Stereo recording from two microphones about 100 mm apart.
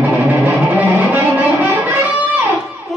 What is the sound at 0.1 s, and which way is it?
Music, 20° right (ahead or behind).